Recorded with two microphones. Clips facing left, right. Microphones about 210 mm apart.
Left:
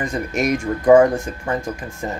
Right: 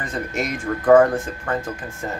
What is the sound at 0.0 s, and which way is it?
Speech, 15° left (ahead or behind).